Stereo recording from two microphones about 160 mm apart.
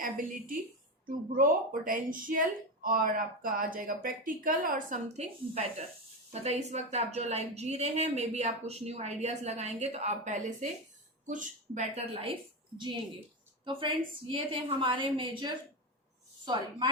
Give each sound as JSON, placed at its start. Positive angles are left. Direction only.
{"t": 0.0, "sound": "a woman's voice", "side_deg": -60}
{"t": 12.2, "sound": "a woman's voice", "side_deg": -30}